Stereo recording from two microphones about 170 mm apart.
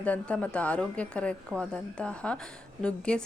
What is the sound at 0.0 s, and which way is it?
Speech, 5° left (ahead or behind).